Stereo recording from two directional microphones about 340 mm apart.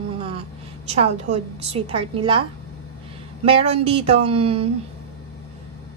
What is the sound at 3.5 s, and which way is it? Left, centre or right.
A woman's voice, centre.